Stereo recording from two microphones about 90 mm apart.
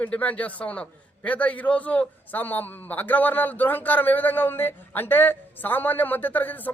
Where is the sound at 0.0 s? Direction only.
15° left (ahead or behind).